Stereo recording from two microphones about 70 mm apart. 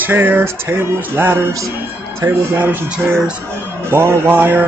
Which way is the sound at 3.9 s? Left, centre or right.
Right.